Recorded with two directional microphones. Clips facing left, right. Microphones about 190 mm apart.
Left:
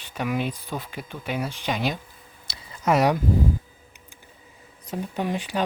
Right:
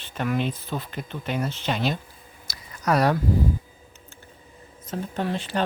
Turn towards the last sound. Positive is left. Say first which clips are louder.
# even
turn(degrees=15)  # may be behind; listen again after turning